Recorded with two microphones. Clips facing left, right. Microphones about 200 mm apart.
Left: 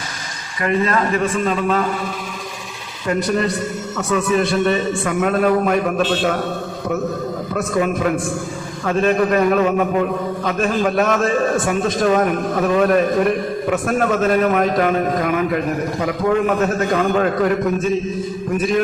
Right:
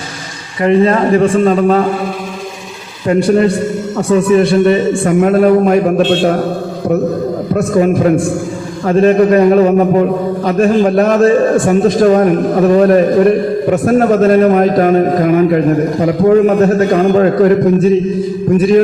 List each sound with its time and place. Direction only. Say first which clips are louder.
0.6 s a man's voice: right 8 dB; 30° right (ahead or behind)
3.1 s a man's voice: right 9 dB; 30° right (ahead or behind)
7.9 s a man's voice: right 8 dB; 30° right (ahead or behind)